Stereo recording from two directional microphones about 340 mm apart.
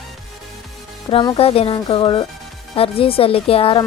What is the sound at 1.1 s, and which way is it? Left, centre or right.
Speech, centre.